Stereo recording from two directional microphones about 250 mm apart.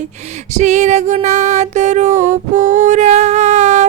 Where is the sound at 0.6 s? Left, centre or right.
Right.